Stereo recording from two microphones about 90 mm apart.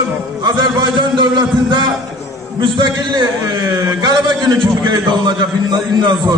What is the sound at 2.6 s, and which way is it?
A man's voice, 60° right (ahead or behind).